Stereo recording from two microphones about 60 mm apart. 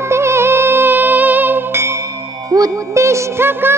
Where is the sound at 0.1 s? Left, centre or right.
Right.